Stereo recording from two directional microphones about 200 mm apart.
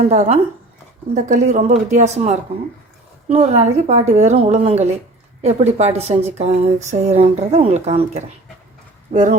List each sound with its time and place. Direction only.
0.0 s speech: 35° right (ahead or behind)